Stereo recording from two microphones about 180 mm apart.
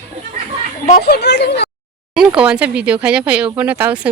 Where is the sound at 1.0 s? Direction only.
65° left (ahead or behind).